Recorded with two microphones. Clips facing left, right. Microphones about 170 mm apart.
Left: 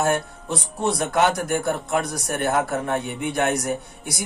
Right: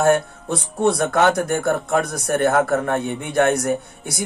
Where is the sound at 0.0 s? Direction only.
55° right (ahead or behind).